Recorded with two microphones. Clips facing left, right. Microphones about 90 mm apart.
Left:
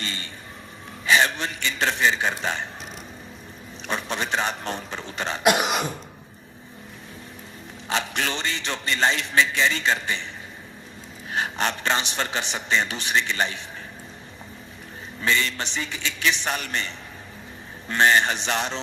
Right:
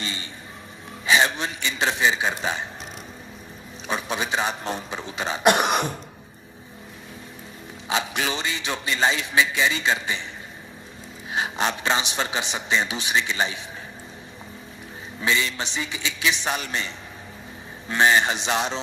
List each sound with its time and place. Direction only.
0.0 s a sound: 15° right (ahead or behind)
1.0 s a man's voice: 15° right (ahead or behind)
3.8 s a man's voice: 10° right (ahead or behind)
5.5 s cough: 5° left (ahead or behind)
7.9 s a man's voice: 10° right (ahead or behind)
11.3 s a man's voice: 15° right (ahead or behind)
15.2 s a man's voice: 15° right (ahead or behind)